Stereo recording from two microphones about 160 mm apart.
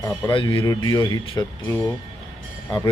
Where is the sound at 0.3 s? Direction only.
30° left (ahead or behind).